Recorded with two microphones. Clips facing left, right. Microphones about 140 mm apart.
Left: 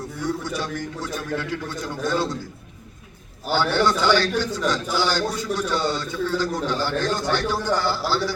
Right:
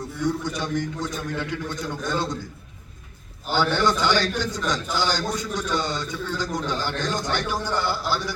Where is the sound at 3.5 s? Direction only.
15° right (ahead or behind).